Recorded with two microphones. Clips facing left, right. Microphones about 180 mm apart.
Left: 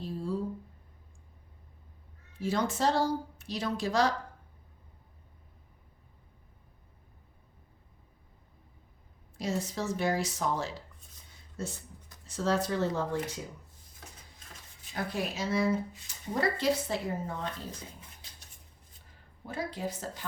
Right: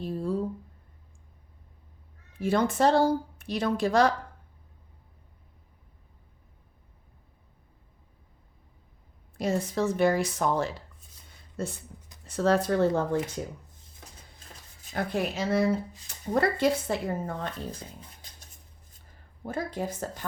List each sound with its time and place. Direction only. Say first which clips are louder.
0.0 s a sound: right 5 dB; 55° right (ahead or behind)
2.4 s speech: right 5 dB; 55° right (ahead or behind)
9.4 s speech: right 6 dB; 55° right (ahead or behind)
14.9 s speech: right 5 dB; 60° right (ahead or behind)
19.4 s speech: right 4 dB; 45° right (ahead or behind)